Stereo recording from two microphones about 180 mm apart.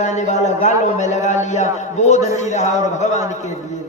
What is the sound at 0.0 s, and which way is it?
A man's voice, 40° left (ahead or behind).